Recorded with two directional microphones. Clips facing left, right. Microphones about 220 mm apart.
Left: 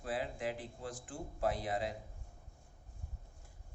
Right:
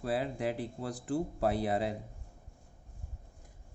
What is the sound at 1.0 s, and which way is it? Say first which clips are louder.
Speech: right 10 dB; 65° right (ahead or behind).